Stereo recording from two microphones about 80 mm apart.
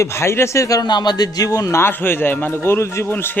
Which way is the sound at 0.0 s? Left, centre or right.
Left.